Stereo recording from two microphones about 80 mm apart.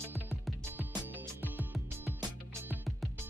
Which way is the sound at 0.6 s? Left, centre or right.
Right.